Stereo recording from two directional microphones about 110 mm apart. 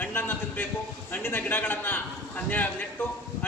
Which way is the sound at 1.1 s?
20° left (ahead or behind).